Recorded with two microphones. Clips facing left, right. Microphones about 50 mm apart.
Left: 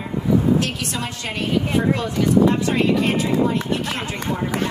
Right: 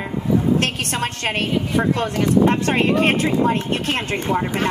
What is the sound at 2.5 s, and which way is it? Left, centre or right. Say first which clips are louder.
Speech: right 1 dB; right.